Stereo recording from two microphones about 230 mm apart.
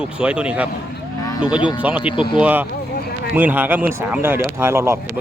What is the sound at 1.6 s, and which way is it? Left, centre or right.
Speech, centre.